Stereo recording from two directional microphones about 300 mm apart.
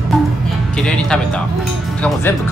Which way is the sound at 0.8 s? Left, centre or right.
Centre.